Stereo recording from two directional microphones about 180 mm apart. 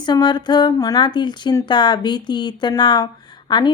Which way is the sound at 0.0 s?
25° left (ahead or behind).